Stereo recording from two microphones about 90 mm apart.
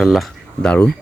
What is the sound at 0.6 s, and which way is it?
Speech, 15° left (ahead or behind).